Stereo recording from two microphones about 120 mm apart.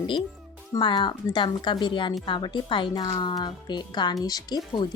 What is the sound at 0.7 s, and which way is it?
Speech, 35° left (ahead or behind).